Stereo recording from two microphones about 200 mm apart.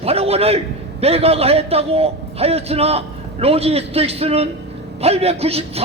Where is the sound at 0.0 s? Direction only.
30° right (ahead or behind).